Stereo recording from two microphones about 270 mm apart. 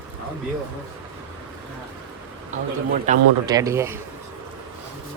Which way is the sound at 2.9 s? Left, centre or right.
Right.